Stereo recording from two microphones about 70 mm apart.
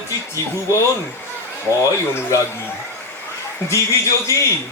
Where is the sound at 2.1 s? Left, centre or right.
Left.